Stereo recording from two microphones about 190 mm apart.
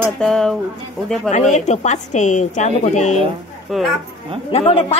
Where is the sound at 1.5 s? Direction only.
40° left (ahead or behind).